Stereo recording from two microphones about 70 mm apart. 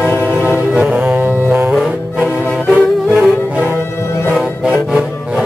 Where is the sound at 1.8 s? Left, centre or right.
Centre.